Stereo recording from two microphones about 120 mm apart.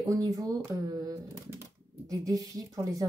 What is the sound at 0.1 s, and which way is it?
Speech, 30° right (ahead or behind).